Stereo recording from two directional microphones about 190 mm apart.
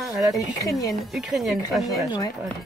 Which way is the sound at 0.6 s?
15° left (ahead or behind).